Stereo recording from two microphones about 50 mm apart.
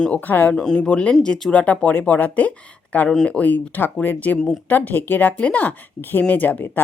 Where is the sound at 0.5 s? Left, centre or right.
Centre; by 5.3 s left.